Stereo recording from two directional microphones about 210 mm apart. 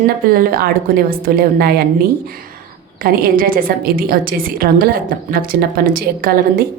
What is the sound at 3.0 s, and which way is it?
A woman's voice, 45° right (ahead or behind).